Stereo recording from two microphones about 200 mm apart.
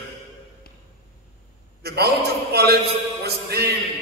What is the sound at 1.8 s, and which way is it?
A man's voice, 55° right (ahead or behind).